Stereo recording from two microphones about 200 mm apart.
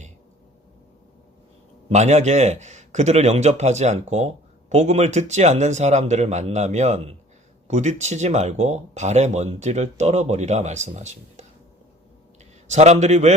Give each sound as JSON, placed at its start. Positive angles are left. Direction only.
{"t": 1.9, "sound": "speech", "side_deg": -35}
{"t": 12.6, "sound": "speech", "side_deg": -35}